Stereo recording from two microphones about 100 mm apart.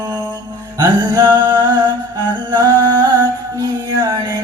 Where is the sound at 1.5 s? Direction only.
45° right (ahead or behind).